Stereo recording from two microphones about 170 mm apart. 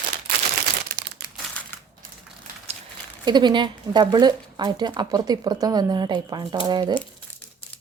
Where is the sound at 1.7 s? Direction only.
15° left (ahead or behind).